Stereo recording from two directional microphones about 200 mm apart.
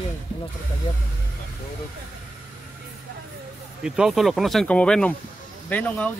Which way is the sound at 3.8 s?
5° right (ahead or behind).